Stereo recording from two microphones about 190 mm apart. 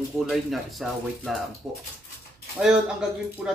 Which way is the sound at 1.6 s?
15° right (ahead or behind).